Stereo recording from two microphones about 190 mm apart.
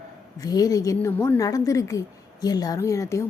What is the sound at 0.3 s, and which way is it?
A woman's voice, 20° left (ahead or behind).